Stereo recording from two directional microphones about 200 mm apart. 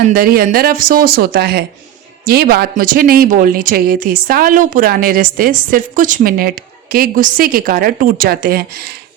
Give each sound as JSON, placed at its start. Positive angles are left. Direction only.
{"t": 0.1, "sound": "speech", "side_deg": -45}